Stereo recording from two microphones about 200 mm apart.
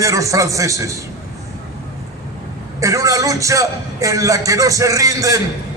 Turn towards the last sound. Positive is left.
turn(degrees=-15)  # may be behind; listen again after turning